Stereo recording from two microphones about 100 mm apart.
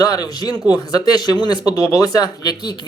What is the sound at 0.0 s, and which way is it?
Speech, 40° left (ahead or behind).